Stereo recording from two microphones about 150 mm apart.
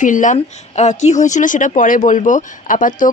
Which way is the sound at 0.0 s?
60° left (ahead or behind).